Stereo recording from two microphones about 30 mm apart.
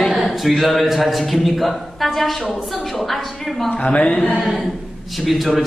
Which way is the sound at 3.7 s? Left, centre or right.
Left.